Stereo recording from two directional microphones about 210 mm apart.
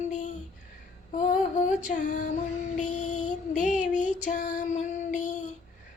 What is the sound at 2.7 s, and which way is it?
Female singing, 35° left (ahead or behind).